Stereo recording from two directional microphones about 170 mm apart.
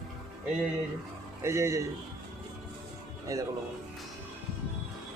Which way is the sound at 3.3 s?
20° right (ahead or behind).